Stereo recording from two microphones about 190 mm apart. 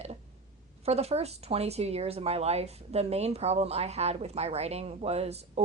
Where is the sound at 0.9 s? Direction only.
35° right (ahead or behind).